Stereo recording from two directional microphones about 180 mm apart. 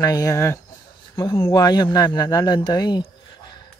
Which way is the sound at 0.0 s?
20° left (ahead or behind).